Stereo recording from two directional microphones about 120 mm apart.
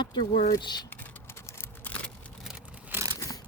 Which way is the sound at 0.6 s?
35° left (ahead or behind).